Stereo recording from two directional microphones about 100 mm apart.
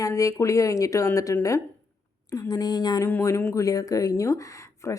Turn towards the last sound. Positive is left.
turn(degrees=30)  # may be behind; listen again after turning